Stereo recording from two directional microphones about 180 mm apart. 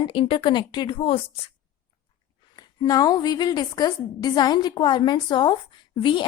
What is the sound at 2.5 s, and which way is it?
A woman's voice, 20° left (ahead or behind).